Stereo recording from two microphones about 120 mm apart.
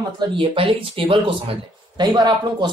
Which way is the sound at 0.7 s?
50° right (ahead or behind).